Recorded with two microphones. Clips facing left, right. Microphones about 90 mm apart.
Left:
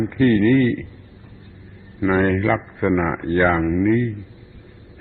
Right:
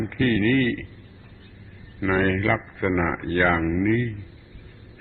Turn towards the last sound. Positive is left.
turn(degrees=0)  # may be behind; listen again after turning